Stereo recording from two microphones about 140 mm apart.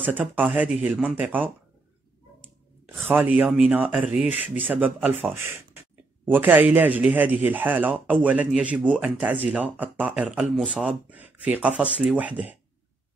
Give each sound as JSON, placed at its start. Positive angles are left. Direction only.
{"t": 0.4, "sound": "speech", "side_deg": -5}
{"t": 3.1, "sound": "speech", "side_deg": -10}